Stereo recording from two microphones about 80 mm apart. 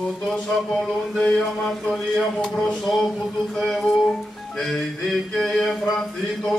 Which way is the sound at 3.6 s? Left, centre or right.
Centre.